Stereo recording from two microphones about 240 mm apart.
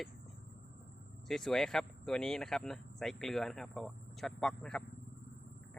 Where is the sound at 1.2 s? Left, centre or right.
Centre.